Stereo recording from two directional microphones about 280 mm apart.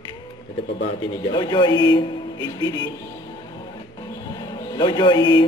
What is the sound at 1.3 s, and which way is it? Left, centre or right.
A man's voice, centre.